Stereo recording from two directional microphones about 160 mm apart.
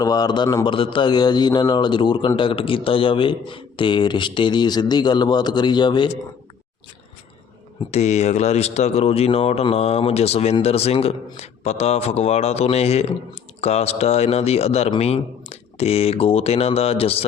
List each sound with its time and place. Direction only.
0.0 s a man's voice: 25° left (ahead or behind)
7.9 s speech: 45° left (ahead or behind)